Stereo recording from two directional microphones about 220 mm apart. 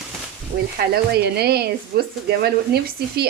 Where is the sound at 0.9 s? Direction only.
45° right (ahead or behind).